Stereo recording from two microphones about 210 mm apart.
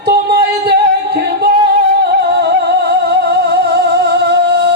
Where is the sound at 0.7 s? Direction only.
50° right (ahead or behind).